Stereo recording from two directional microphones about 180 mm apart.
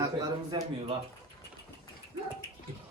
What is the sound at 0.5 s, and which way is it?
Speech, 25° right (ahead or behind).